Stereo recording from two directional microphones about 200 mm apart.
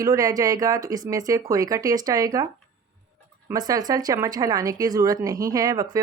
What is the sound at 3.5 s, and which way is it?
Speech, 20° right (ahead or behind).